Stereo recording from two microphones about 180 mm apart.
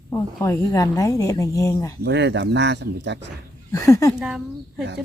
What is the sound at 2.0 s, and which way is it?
Speech, 75° right (ahead or behind).